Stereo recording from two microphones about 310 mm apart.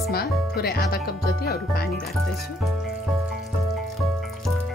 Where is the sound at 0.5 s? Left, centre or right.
Left.